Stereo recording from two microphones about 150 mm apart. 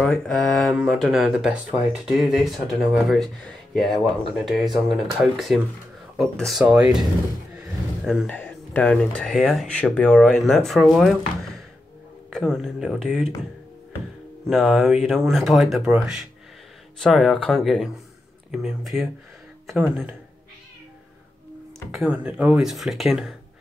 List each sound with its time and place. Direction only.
0.0 s speech: 5° left (ahead or behind)
7.5 s a sound: 5° right (ahead or behind)
8.3 s speech: 10° left (ahead or behind)
12.3 s speech: centre (ahead or behind)
14.5 s speech: centre (ahead or behind)
21.9 s speech: 10° right (ahead or behind)